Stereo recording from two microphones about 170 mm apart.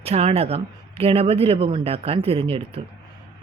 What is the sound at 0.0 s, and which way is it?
Speech, 35° right (ahead or behind).